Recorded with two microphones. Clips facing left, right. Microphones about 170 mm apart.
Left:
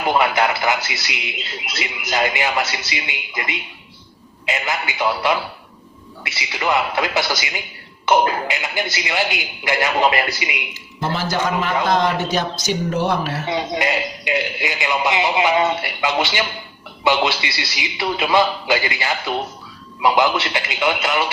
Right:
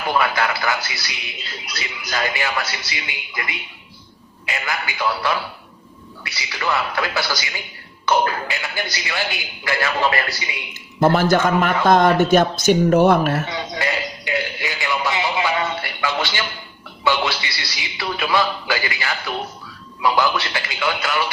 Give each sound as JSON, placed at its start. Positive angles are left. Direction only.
{"t": 0.0, "sound": "speech", "side_deg": 20}
{"t": 10.8, "sound": "a man's voice", "side_deg": -50}
{"t": 13.5, "sound": "speech", "side_deg": 25}